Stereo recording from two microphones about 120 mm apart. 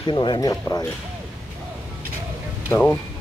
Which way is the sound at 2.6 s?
20° left (ahead or behind).